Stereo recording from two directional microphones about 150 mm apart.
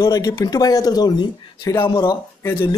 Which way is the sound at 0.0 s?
25° left (ahead or behind).